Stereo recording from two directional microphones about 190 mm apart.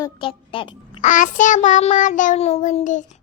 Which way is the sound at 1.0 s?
40° left (ahead or behind).